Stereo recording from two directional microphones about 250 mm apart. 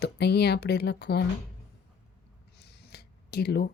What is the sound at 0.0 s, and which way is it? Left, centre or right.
Speech, left.